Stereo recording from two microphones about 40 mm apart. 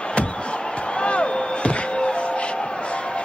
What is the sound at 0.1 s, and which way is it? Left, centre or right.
Slam, left.